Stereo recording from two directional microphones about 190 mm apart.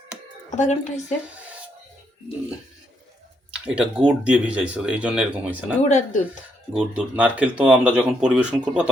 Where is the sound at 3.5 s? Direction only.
5° right (ahead or behind).